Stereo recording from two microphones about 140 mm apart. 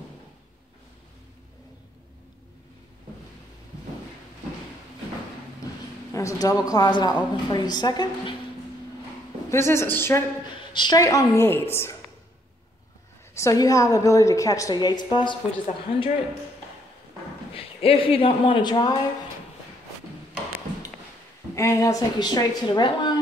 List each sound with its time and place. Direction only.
6.1 s a woman's voice: 25° left (ahead or behind)
9.5 s a woman's voice: 20° left (ahead or behind)
10.5 s a woman's voice: 35° left (ahead or behind); by 12.0 s 20° left (ahead or behind)
13.3 s a woman's voice: 20° left (ahead or behind); by 16.1 s 35° left (ahead or behind)
17.6 s a man's voice: 40° left (ahead or behind)
21.5 s a woman's voice: 20° left (ahead or behind)